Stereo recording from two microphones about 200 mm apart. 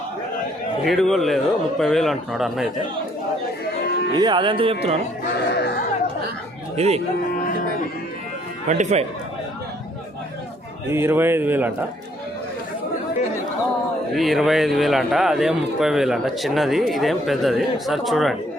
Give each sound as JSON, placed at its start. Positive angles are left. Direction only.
{"t": 0.9, "sound": "a man's voice", "side_deg": 0}
{"t": 4.1, "sound": "speech", "side_deg": -20}
{"t": 5.2, "sound": "speech", "side_deg": 55}
{"t": 6.7, "sound": "speech", "side_deg": -30}
{"t": 8.6, "sound": "speech", "side_deg": -35}
{"t": 10.9, "sound": "a man's voice", "side_deg": -10}
{"t": 14.1, "sound": "a man's voice", "side_deg": 0}